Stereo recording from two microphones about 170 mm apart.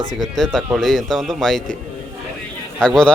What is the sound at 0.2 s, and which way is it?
Speech, centre (ahead or behind).